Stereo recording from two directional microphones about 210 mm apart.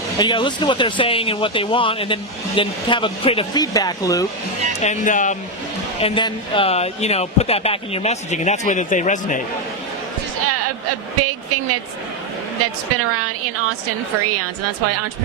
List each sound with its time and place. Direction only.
0.2 s speech: 20° left (ahead or behind)
4.8 s speech: 35° left (ahead or behind)
6.0 s speech: 25° left (ahead or behind)
11.2 s speech: 90° right